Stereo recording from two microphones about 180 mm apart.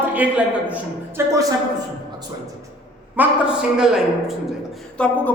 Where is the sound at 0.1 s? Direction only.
10° right (ahead or behind).